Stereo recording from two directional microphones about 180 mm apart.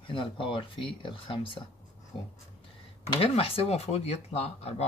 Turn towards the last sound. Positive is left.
turn(degrees=35)  # may be behind; listen again after turning